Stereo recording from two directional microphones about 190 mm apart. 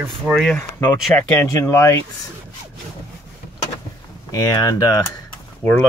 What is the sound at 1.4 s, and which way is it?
Speech, 15° left (ahead or behind).